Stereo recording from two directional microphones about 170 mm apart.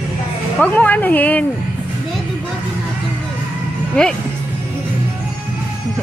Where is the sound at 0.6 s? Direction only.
10° left (ahead or behind).